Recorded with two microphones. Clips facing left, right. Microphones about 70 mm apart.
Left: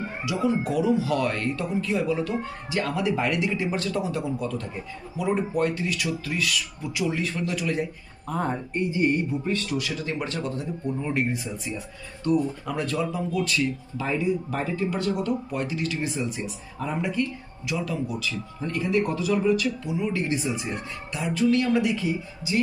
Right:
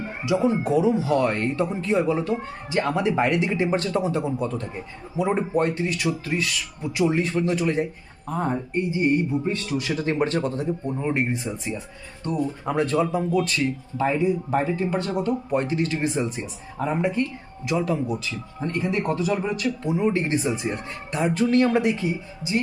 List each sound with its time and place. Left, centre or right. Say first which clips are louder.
0.3 s speech: right 4 dB; right
11.0 s speech: right 3 dB; right
14.5 s speech: right 4 dB; right